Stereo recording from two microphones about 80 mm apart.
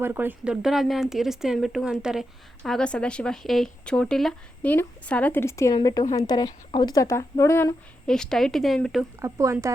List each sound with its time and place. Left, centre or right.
0.0 s speech: right
0.4 s speech: centre
2.6 s speech: centre
4.6 s a woman's voice: left
5.4 s a woman's voice: left
5.8 s a woman's voice: left
7.0 s a woman's voice: left
8.0 s speech: centre
9.2 s speech: right